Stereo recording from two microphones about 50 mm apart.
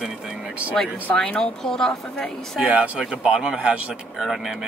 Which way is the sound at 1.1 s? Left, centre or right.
Centre.